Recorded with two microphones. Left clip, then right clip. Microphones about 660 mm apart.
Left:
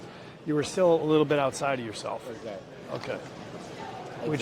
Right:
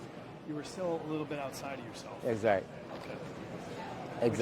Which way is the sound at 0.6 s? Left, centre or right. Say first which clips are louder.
Left 14 dB; left.